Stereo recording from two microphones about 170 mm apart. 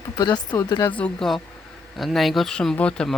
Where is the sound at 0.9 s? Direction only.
5° left (ahead or behind).